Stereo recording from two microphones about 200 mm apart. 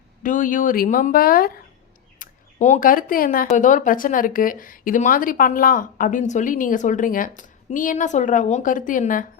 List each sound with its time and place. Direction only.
0.2 s speech: 40° left (ahead or behind)